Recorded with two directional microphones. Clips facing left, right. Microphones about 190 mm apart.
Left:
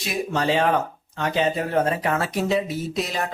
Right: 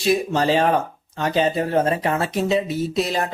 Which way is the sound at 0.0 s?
35° right (ahead or behind).